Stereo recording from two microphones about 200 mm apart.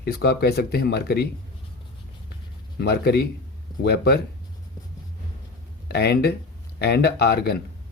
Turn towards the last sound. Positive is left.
turn(degrees=50)  # may be behind; listen again after turning